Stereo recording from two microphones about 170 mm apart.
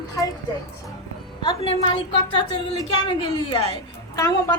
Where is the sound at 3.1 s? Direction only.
25° left (ahead or behind).